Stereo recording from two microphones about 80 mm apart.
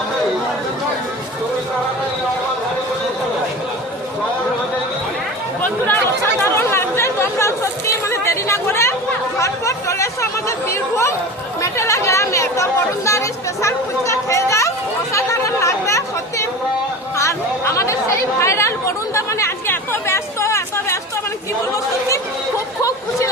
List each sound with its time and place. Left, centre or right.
6.4 s chatter: left
22.8 s chatter: left